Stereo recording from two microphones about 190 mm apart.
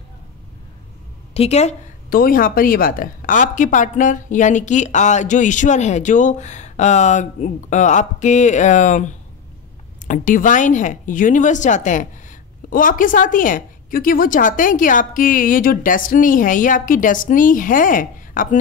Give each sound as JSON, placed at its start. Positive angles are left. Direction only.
{"t": 1.3, "sound": "a woman's voice", "side_deg": 35}
{"t": 2.0, "sound": "a woman's voice", "side_deg": 50}